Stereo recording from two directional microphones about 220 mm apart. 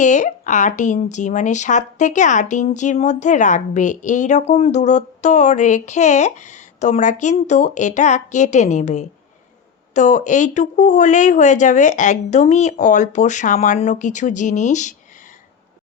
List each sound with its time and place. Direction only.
0.0 s speech: 35° left (ahead or behind)